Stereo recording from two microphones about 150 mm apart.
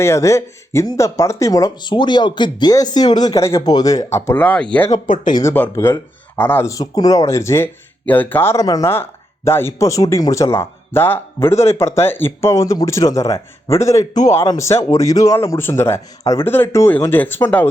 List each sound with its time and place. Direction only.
0.0 s speech: 20° left (ahead or behind)
5.0 s speech: 60° left (ahead or behind)
5.3 s speech: 20° left (ahead or behind)